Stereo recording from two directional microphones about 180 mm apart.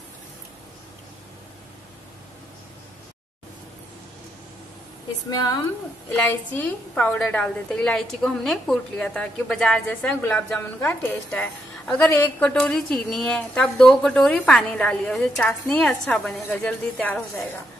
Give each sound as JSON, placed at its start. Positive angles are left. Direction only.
{"t": 5.3, "sound": "speech", "side_deg": 20}
{"t": 6.5, "sound": "a woman's voice", "side_deg": 10}